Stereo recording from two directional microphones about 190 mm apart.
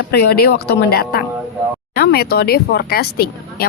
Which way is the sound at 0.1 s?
55° left (ahead or behind).